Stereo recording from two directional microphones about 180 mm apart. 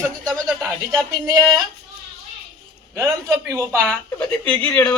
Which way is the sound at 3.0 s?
15° right (ahead or behind).